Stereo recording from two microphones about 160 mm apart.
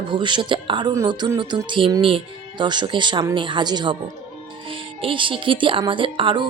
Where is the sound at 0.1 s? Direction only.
30° right (ahead or behind).